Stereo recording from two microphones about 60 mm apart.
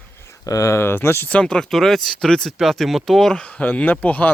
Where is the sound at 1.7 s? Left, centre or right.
Centre.